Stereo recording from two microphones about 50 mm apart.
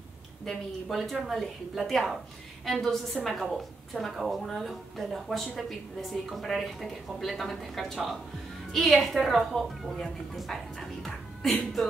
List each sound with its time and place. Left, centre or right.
0.5 s a woman's voice: centre